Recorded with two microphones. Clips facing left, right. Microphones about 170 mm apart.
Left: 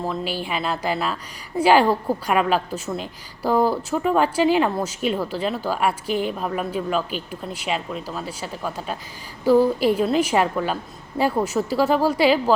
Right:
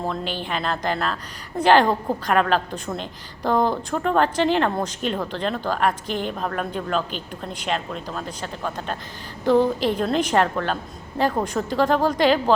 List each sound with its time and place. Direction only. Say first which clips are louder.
0.0 s a woman's voice: left 1 dB; 5° left (ahead or behind)